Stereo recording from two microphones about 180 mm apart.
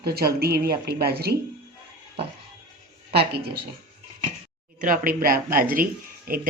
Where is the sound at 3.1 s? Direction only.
65° right (ahead or behind).